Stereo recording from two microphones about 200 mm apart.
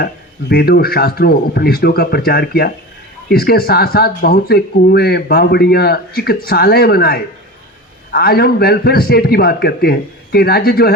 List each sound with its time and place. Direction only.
0.0 s speech: 50° left (ahead or behind)